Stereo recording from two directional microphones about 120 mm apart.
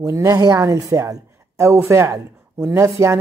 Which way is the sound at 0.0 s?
25° right (ahead or behind).